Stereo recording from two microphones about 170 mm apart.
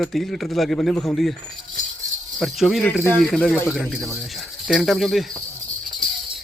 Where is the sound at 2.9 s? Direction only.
10° left (ahead or behind).